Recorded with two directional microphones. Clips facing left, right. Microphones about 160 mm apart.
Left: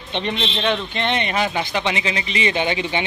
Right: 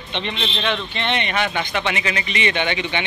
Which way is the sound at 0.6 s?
15° left (ahead or behind).